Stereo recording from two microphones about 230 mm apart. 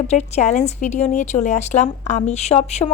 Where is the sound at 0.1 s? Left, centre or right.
Left.